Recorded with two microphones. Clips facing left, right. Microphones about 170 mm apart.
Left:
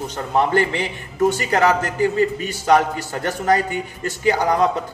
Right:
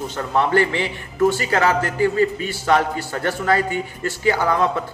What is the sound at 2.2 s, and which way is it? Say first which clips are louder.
A man's voice: even; 20° left (ahead or behind).